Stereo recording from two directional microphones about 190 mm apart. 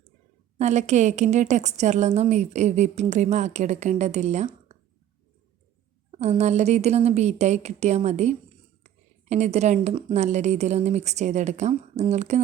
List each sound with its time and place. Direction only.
0.6 s a woman's voice: 35° right (ahead or behind)
6.1 s a woman's voice: 35° right (ahead or behind)